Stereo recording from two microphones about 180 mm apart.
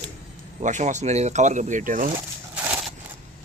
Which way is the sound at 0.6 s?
40° right (ahead or behind).